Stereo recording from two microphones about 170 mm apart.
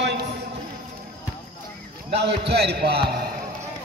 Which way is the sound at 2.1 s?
85° right.